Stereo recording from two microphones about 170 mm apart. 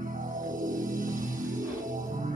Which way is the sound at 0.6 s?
50° right (ahead or behind).